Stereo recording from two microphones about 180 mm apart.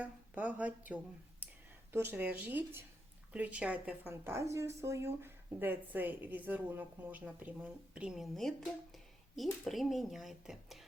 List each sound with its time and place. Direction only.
0.0 s a woman's voice: 10° right (ahead or behind)